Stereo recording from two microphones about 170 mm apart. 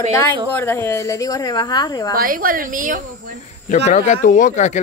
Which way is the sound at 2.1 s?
55° right (ahead or behind).